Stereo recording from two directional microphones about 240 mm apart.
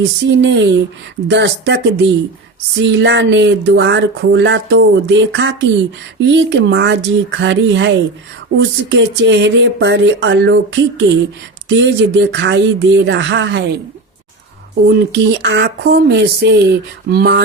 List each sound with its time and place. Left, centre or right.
0.3 s speech: right
14.8 s speech: right